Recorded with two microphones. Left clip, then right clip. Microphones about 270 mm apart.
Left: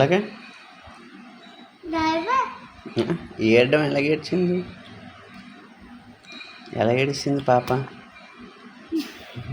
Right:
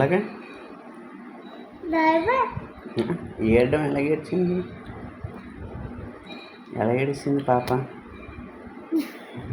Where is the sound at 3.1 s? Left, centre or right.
Left.